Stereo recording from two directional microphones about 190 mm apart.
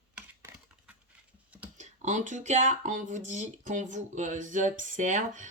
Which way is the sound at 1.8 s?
40° right (ahead or behind).